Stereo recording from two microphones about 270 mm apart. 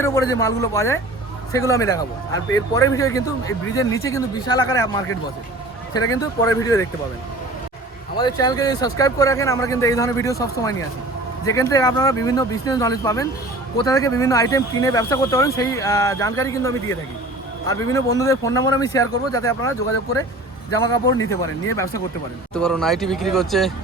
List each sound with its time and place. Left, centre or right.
0.0 s speech: centre
6.1 s speech: centre
8.1 s speech: centre
21.2 s speech: centre